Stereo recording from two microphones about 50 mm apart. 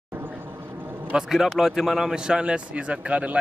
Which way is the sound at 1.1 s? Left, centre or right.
Centre.